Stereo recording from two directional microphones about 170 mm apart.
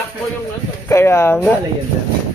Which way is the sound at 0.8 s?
15° left (ahead or behind).